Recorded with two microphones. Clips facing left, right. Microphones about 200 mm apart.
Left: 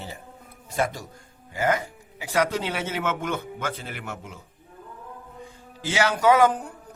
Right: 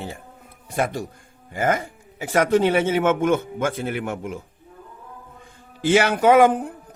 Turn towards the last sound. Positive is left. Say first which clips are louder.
# right 4 dB
turn(degrees=-55)  # may be behind; listen again after turning